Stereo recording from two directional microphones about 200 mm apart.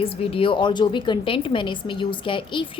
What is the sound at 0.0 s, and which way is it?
A woman's voice, 30° left (ahead or behind).